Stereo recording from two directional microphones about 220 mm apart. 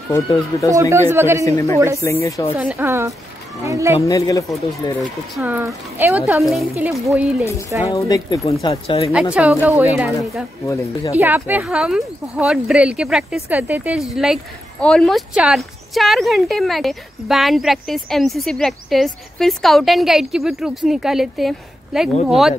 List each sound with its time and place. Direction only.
0.1 s speech: 15° left (ahead or behind)
0.7 s speech: 10° right (ahead or behind)
1.4 s speech: 15° left (ahead or behind)
2.5 s speech: 5° right (ahead or behind)
4.0 s speech: 15° left (ahead or behind)
5.0 s speech: 5° right (ahead or behind)
7.9 s speech: 15° left (ahead or behind)
9.1 s speech: 5° right (ahead or behind)